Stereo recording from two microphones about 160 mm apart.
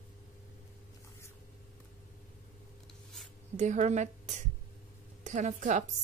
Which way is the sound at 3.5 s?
45° right (ahead or behind).